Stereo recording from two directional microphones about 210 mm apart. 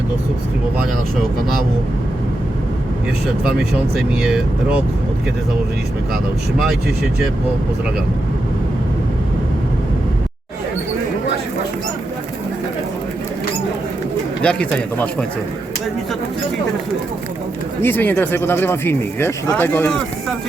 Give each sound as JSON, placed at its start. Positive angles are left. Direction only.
{"t": 3.6, "sound": "speech", "side_deg": -5}
{"t": 14.4, "sound": "speech", "side_deg": 5}
{"t": 17.8, "sound": "speech", "side_deg": 10}